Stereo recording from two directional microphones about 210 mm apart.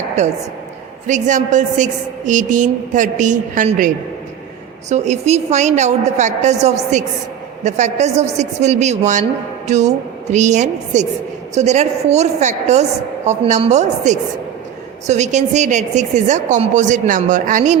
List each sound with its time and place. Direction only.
1.0 s a woman's voice: 35° right (ahead or behind)